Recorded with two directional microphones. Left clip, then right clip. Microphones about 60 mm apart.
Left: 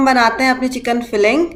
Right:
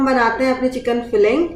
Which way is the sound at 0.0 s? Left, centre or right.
Left.